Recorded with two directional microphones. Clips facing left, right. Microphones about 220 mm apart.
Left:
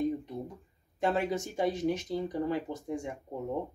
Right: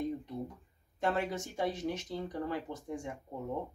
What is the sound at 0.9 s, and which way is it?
Speech, 15° left (ahead or behind).